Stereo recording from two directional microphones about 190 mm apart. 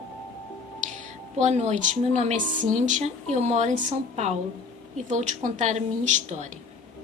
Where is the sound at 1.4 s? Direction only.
35° right (ahead or behind).